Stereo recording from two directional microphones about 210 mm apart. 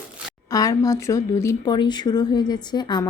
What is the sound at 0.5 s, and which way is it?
A woman's voice, 15° left (ahead or behind).